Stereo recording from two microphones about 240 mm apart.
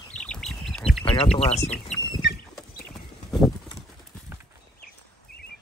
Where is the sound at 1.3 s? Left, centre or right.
Left.